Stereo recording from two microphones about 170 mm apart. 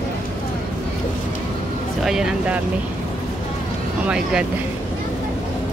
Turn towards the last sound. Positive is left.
turn(degrees=-5)  # may be behind; listen again after turning